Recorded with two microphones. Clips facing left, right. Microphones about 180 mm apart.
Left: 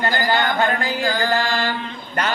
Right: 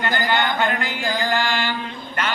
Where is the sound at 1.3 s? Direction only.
40° left (ahead or behind).